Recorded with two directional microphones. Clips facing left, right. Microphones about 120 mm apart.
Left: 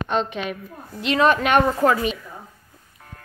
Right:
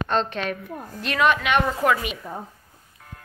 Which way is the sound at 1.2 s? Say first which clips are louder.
Left 3 dB; 40° left (ahead or behind).